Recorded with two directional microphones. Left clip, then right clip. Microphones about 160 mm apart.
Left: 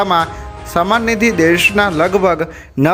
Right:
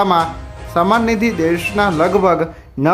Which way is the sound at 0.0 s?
20° left (ahead or behind).